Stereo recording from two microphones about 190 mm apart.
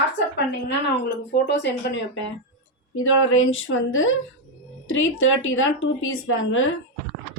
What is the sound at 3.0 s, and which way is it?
A woman's voice, 90° left.